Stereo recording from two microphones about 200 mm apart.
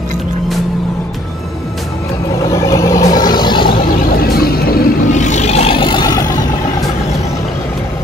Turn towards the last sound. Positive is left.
turn(degrees=15)  # may be behind; listen again after turning